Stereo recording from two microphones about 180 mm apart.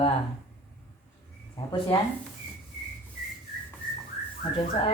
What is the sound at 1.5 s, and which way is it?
Speech, 25° left (ahead or behind).